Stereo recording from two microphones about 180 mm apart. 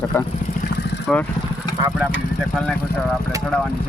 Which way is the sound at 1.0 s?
5° left (ahead or behind).